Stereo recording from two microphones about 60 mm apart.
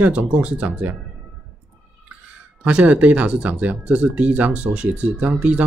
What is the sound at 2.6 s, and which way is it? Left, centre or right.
Speech, right.